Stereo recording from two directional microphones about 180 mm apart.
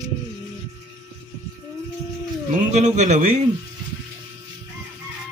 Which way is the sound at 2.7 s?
40° right (ahead or behind).